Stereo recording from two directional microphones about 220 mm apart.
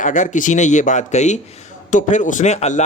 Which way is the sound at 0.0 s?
35° left (ahead or behind).